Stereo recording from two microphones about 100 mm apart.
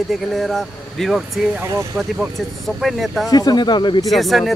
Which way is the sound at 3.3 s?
40° left (ahead or behind).